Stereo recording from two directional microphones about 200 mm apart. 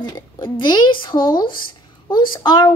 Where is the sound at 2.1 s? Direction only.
20° left (ahead or behind).